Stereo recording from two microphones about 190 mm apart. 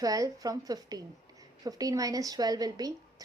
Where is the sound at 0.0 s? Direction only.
20° right (ahead or behind).